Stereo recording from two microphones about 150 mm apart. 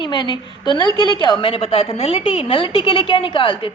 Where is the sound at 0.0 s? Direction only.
30° left (ahead or behind).